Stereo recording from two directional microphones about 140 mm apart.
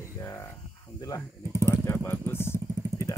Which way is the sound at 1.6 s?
20° left (ahead or behind).